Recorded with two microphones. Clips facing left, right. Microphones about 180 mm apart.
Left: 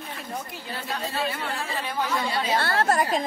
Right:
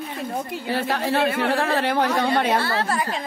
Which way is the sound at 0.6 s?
85° right.